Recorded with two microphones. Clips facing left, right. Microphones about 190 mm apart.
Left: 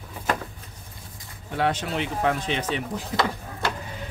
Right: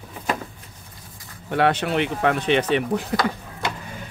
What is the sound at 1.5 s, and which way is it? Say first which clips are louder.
Speech: right 5 dB; 65° right (ahead or behind).